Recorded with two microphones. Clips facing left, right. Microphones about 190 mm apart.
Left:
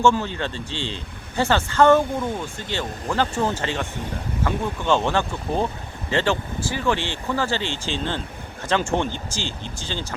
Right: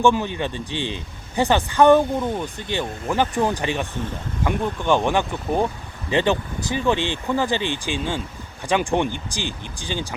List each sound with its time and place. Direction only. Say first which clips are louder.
0.0 s speech: right 1 dB; 15° right (ahead or behind)